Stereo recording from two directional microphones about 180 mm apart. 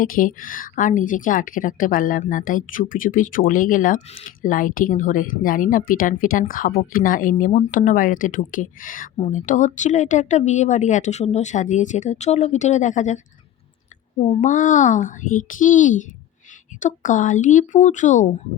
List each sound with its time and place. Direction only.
0.0 s speech: 50° left (ahead or behind)
14.4 s speech: 45° left (ahead or behind)